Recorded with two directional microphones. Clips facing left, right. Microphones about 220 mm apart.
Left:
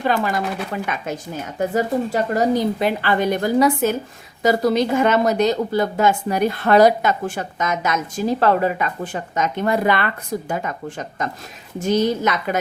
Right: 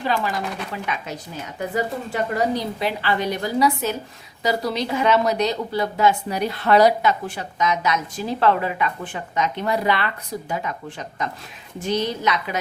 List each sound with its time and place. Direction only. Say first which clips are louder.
0.0 s a woman's voice: left 4 dB; 50° left (ahead or behind)